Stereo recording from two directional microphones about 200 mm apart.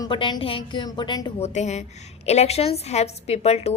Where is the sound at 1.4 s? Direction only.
35° left (ahead or behind).